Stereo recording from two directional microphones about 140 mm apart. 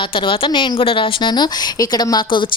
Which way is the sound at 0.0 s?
40° left (ahead or behind).